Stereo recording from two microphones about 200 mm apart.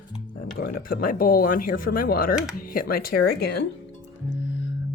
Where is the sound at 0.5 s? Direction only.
45° left (ahead or behind).